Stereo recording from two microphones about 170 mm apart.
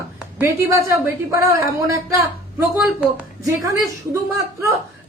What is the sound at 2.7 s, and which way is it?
A woman's voice, 10° right (ahead or behind).